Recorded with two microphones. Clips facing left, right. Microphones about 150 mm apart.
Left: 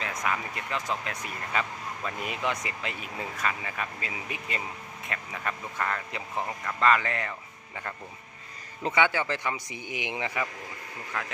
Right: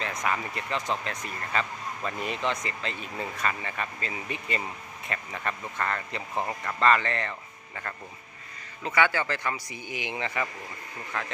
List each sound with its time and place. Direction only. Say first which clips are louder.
0.0 s speech: right 1 dB; 5° left (ahead or behind)
8.9 s speech: right 1 dB; 15° left (ahead or behind)
11.1 s speech: right 1 dB; 5° left (ahead or behind)